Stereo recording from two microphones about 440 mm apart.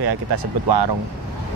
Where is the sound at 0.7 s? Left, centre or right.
Right.